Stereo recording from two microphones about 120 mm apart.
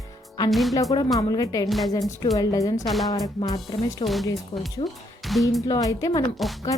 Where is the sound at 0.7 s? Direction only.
30° left (ahead or behind).